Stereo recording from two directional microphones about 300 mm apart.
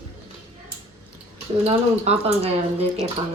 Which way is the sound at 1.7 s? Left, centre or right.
Right.